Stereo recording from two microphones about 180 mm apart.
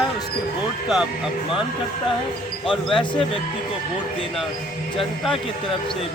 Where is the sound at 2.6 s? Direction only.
25° left (ahead or behind).